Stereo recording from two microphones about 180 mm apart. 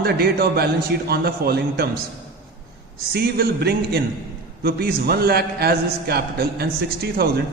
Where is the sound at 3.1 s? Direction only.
60° right (ahead or behind).